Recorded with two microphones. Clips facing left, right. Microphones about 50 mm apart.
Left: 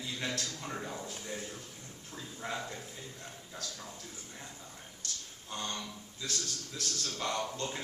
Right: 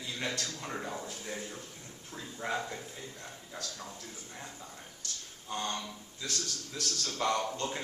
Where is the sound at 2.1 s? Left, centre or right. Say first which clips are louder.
Right 4 dB; centre.